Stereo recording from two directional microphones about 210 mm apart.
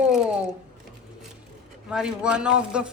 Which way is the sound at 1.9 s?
5° right (ahead or behind).